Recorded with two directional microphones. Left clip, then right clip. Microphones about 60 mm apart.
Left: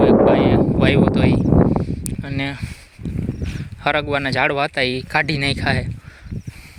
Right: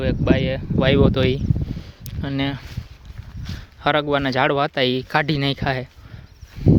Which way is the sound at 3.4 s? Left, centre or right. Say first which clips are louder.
Even; right.